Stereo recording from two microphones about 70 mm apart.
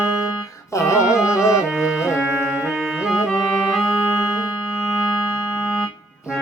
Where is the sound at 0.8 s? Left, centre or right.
Left.